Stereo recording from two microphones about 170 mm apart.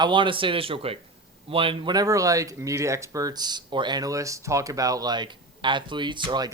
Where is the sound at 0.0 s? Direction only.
30° right (ahead or behind).